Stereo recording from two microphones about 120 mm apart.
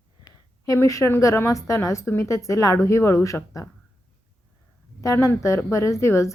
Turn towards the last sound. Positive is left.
turn(degrees=25)  # may be behind; listen again after turning